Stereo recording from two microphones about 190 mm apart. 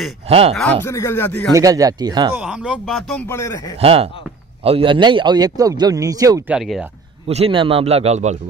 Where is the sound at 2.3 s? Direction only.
5° right (ahead or behind).